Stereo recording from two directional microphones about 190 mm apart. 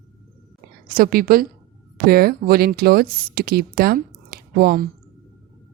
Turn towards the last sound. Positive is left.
turn(degrees=-50)  # may be behind; listen again after turning